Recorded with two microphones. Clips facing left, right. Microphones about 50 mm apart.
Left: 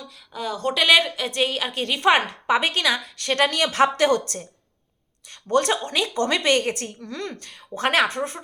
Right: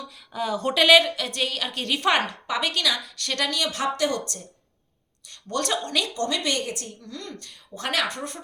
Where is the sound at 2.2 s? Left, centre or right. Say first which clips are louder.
Left 5 dB; left.